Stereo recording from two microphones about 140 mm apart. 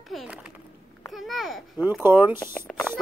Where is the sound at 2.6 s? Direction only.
5° left (ahead or behind).